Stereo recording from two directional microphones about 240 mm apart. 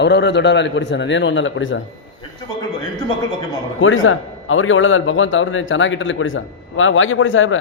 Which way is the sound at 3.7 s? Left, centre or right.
Left.